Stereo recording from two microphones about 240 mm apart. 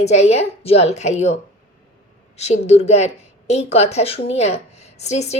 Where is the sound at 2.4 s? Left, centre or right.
Left.